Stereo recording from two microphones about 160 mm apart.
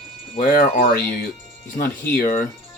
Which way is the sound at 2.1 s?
60° left (ahead or behind).